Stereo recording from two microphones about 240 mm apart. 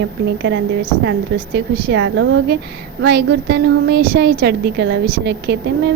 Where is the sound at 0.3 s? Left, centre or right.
Right.